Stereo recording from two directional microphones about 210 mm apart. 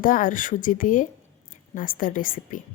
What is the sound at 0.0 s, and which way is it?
Speech, 40° left (ahead or behind).